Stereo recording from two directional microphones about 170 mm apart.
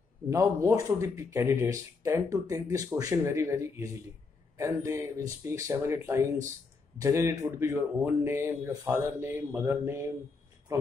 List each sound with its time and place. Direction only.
0.3 s speech: 20° right (ahead or behind)